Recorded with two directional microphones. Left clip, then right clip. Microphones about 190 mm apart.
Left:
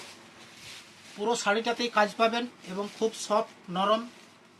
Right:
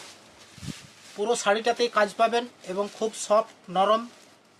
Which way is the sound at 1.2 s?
40° right (ahead or behind).